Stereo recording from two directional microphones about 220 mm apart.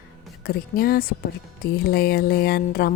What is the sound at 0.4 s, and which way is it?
A woman's voice, 40° left (ahead or behind).